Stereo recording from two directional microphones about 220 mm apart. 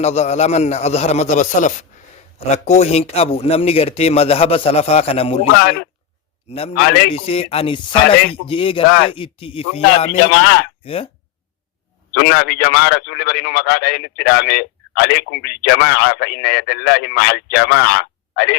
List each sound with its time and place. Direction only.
0.0 s a man's voice: 30° left (ahead or behind)
5.5 s a man's voice: 45° left (ahead or behind)
6.5 s a man's voice: 25° left (ahead or behind)
6.7 s a man's voice: 45° left (ahead or behind)
7.1 s a man's voice: 25° left (ahead or behind)
10.2 s a man's voice: 45° left (ahead or behind)
10.8 s a man's voice: 25° left (ahead or behind)
12.1 s a man's voice: 45° left (ahead or behind)